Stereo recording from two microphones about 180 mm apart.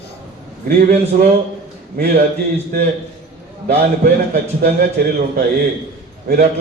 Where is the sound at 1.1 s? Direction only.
45° right (ahead or behind).